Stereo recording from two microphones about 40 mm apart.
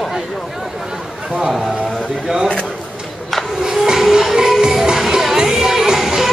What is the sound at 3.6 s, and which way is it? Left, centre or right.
Music, centre.